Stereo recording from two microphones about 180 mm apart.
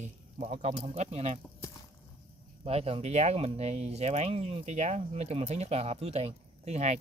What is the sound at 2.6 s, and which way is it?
Speech, 35° right (ahead or behind).